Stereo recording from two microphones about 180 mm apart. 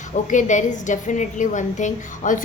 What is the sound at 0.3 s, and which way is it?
A woman's voice, 45° left (ahead or behind).